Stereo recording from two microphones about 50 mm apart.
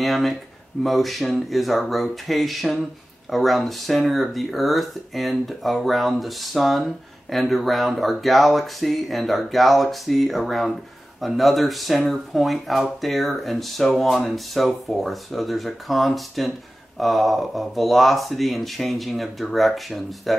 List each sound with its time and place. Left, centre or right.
0.0 s speech: centre